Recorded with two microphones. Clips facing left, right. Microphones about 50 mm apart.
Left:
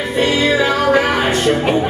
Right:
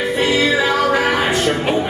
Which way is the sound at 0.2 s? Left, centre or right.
Centre.